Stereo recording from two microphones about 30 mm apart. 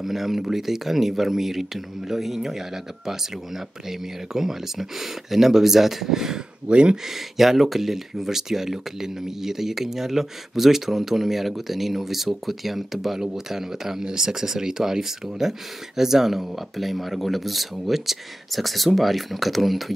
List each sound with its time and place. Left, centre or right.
0.0 s speech: centre
6.7 s speech: right
7.1 s speech: centre